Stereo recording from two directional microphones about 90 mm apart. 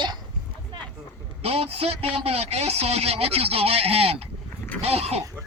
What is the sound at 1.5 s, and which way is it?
Speech, 90° right.